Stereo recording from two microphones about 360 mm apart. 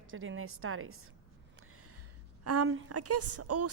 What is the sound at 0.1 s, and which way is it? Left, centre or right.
Speech, right.